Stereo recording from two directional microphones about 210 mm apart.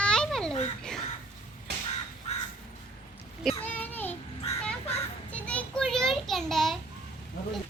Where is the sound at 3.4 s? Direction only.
5° left (ahead or behind).